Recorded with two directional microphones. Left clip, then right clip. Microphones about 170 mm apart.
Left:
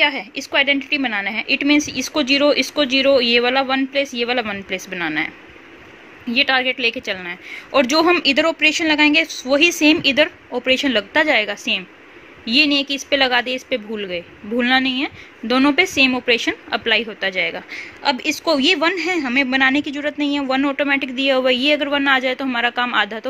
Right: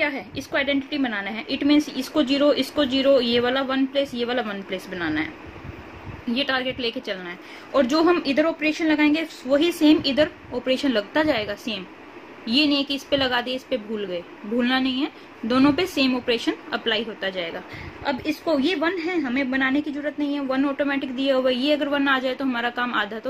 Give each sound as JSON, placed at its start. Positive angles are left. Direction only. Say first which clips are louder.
{"t": 0.0, "sound": "a woman's voice", "louder": "left 7 dB", "side_deg": 30}